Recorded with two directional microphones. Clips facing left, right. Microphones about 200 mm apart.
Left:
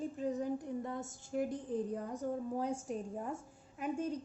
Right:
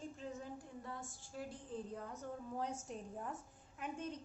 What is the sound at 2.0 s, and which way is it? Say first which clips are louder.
Speech: left 9 dB; 35° left (ahead or behind).